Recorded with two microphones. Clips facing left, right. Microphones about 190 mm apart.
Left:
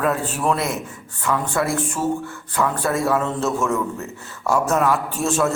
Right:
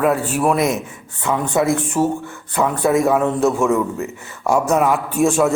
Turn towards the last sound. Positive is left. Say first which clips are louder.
# right 5 dB
turn(degrees=-15)  # may be behind; listen again after turning